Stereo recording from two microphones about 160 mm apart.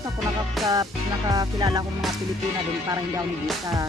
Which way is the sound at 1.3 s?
25° right (ahead or behind).